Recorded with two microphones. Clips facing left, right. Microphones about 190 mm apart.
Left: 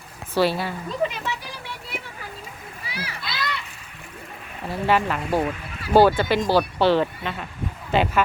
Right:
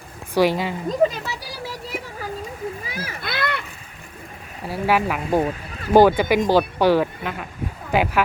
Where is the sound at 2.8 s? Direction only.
45° right (ahead or behind).